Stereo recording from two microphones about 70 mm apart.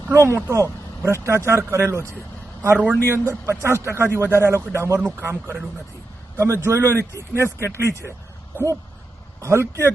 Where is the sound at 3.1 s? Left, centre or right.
Right.